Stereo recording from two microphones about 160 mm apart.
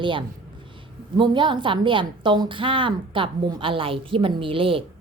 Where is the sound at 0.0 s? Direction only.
30° right (ahead or behind).